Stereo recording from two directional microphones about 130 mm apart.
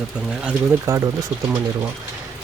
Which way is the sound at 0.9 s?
20° right (ahead or behind).